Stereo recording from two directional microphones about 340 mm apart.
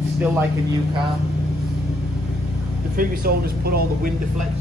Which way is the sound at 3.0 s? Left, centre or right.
Right.